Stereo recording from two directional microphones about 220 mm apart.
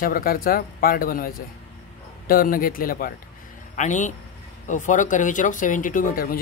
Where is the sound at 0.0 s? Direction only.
40° left (ahead or behind).